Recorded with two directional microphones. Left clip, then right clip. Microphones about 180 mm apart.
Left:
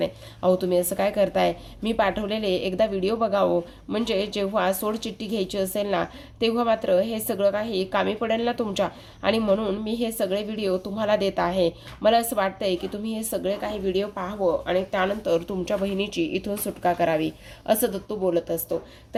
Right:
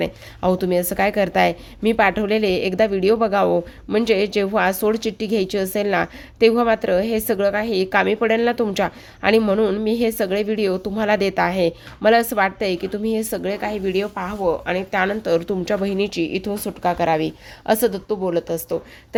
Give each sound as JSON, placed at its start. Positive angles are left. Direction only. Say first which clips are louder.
{"t": 0.0, "sound": "a woman's voice", "louder": "right 2 dB", "side_deg": -40}